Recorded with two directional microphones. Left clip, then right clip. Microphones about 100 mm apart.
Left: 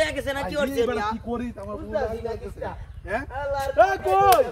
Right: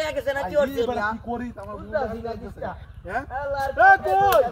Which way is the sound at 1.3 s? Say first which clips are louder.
Even; 15° left (ahead or behind).